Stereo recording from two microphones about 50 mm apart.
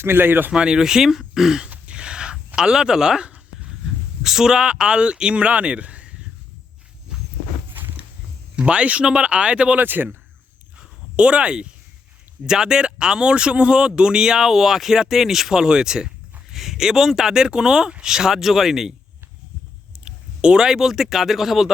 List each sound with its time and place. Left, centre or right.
0.0 s speech: right
0.5 s speech: centre
1.9 s a sound: centre
2.6 s speech: centre
7.1 s walk: centre
8.5 s speech: right
9.7 s speech: right
10.8 s a sound: right
12.5 s speech: centre
20.1 s speech: centre